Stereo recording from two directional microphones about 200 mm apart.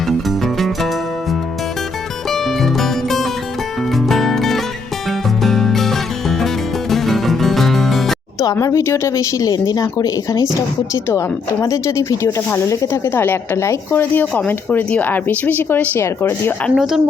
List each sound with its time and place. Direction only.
0.3 s music: centre (ahead or behind)
2.3 s music: centre (ahead or behind)
8.4 s speech: 15° left (ahead or behind)
16.7 s speech: 5° right (ahead or behind)